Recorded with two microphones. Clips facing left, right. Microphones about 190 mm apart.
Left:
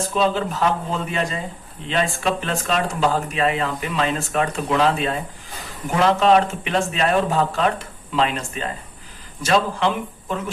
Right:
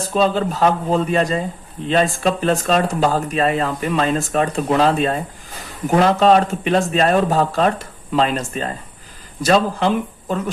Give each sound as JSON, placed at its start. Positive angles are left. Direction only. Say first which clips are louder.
{"t": 0.1, "sound": "speech", "louder": "right 5 dB", "side_deg": -40}